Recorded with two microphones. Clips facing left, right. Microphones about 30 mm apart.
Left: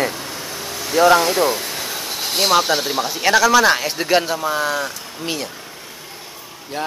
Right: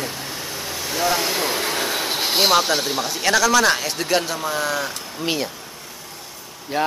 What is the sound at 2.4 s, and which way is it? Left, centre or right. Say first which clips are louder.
Speech: left 2 dB; centre.